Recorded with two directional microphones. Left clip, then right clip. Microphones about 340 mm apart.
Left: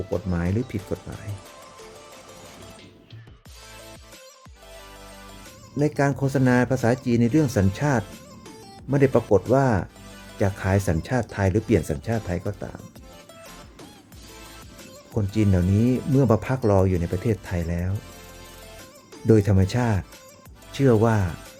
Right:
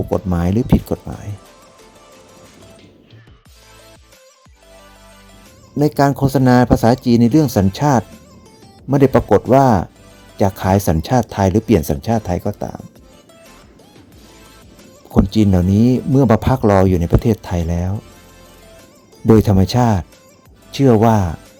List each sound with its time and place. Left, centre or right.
0.1 s speech: centre
5.8 s speech: centre
15.1 s speech: centre
19.2 s speech: centre